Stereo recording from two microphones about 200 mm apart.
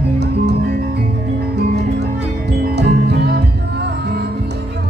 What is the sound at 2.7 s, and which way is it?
Music, 55° right (ahead or behind).